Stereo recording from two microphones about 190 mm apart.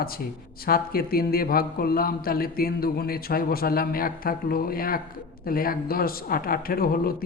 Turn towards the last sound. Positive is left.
turn(degrees=50)  # may be behind; listen again after turning